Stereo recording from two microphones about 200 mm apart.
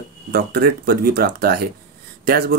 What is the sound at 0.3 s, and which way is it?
Speech, 50° right (ahead or behind).